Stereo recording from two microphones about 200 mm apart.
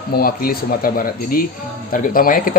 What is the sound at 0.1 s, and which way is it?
Speech, 45° left (ahead or behind).